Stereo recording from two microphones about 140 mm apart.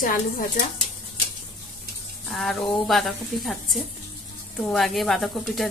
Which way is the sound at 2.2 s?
Centre (ahead or behind).